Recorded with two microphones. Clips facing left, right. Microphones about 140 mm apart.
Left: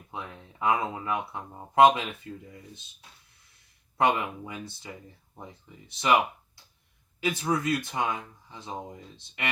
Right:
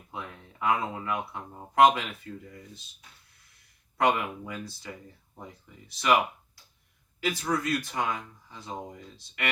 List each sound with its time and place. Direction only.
0.6 s speech: 25° left (ahead or behind)
3.9 s speech: 25° left (ahead or behind)
5.9 s speech: 25° left (ahead or behind)
7.2 s speech: 20° left (ahead or behind)